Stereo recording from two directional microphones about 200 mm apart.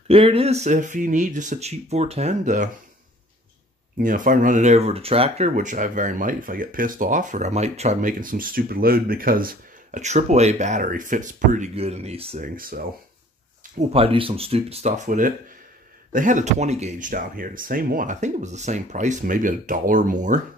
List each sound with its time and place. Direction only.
0.1 s speech: 30° right (ahead or behind)
4.0 s speech: 40° right (ahead or behind)
12.4 s speech: 45° right (ahead or behind)
13.7 s speech: 30° right (ahead or behind)